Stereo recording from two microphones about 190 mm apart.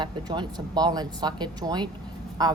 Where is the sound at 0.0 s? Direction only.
20° right (ahead or behind).